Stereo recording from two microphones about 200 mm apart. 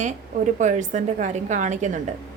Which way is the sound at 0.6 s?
40° right (ahead or behind).